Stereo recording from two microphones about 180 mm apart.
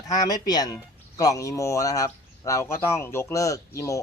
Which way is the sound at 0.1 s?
20° left (ahead or behind).